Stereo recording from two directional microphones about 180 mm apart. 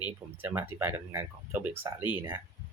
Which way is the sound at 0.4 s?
10° right (ahead or behind).